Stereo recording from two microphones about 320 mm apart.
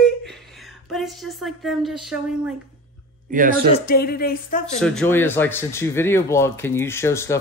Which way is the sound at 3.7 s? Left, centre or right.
Left.